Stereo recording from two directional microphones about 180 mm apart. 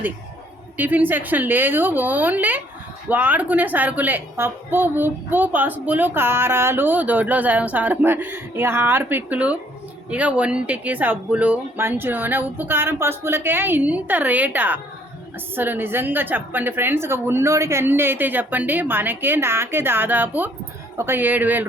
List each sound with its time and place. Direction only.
0.8 s a woman's voice: 10° right (ahead or behind)